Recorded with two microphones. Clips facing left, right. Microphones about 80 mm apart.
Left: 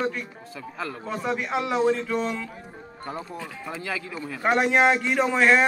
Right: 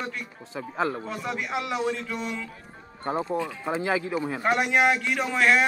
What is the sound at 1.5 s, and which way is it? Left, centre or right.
Speech, left.